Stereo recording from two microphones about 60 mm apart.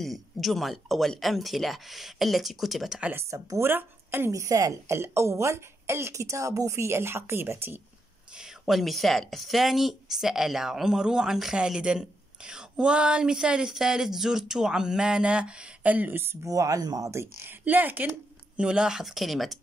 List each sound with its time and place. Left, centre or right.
0.0 s a man's voice: centre
3.3 s a woman's voice: right
3.7 s a woman's voice: right
4.3 s a woman's voice: right
4.9 s a woman's voice: right
8.4 s a woman's voice: centre; by 16.3 s right
16.4 s speech: right
17.1 s speech: right
18.6 s a woman's voice: centre